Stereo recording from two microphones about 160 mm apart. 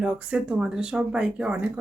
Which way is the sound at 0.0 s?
5° right (ahead or behind).